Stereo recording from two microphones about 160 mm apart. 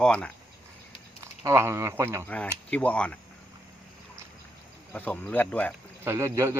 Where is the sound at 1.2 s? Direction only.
20° right (ahead or behind).